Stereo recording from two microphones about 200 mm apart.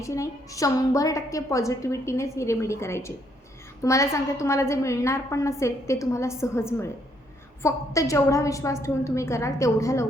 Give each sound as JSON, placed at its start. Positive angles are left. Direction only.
{"t": 0.0, "sound": "a woman's voice", "side_deg": 15}